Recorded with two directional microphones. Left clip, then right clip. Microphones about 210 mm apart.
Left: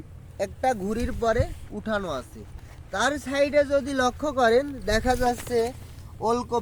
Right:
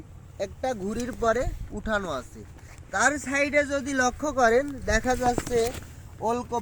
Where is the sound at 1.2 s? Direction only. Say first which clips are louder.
Even; 15° left (ahead or behind).